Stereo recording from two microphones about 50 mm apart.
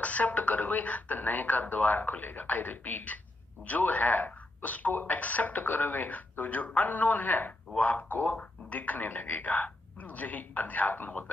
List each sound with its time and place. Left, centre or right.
0.0 s speech: left